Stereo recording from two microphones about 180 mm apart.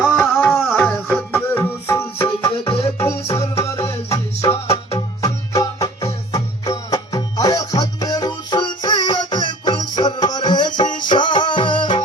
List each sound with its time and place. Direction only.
0.2 s music: 10° left (ahead or behind)
2.4 s music: 30° left (ahead or behind)
3.3 s music: 15° left (ahead or behind)
4.6 s music: 35° left (ahead or behind)
5.2 s music: 20° left (ahead or behind)